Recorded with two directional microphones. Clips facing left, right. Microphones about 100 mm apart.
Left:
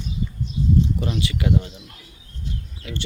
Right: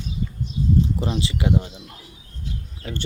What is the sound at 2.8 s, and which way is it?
Speech, 40° right (ahead or behind).